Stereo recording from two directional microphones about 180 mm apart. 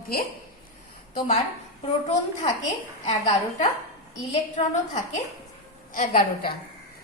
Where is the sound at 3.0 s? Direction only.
40° left (ahead or behind).